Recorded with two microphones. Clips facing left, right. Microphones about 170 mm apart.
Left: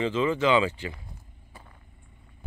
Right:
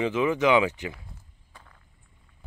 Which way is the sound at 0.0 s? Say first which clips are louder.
Right 1 dB; 15° right (ahead or behind).